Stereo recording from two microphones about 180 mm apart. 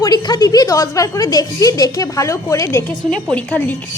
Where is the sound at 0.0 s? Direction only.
25° left (ahead or behind).